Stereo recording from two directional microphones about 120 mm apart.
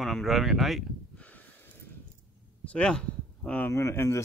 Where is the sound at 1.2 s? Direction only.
15° left (ahead or behind).